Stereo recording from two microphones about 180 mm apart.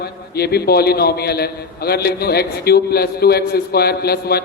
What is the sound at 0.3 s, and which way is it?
A man's voice, 60° left (ahead or behind).